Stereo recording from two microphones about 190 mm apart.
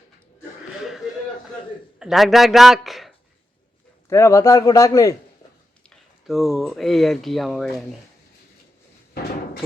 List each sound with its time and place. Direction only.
2.0 s a man's voice: centre (ahead or behind)
4.1 s a man's voice: 15° left (ahead or behind)
5.8 s speech: centre (ahead or behind)